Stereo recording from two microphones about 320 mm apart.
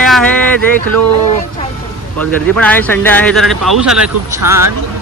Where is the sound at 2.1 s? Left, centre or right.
Centre.